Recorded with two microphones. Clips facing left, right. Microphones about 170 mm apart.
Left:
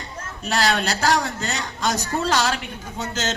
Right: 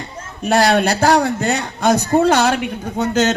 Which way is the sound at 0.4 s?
55° right (ahead or behind).